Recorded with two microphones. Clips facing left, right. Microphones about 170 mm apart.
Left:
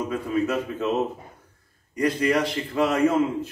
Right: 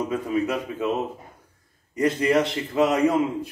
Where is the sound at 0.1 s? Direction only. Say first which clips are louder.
Even; 15° right (ahead or behind).